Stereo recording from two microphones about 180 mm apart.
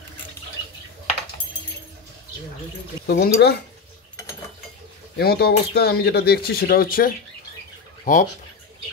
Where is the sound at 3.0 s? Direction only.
65° left (ahead or behind).